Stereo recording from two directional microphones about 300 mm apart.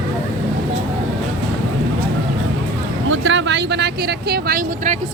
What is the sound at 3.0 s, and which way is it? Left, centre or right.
Vehicle, right.